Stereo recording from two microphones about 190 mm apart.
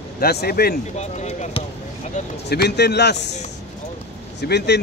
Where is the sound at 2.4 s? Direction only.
60° left (ahead or behind).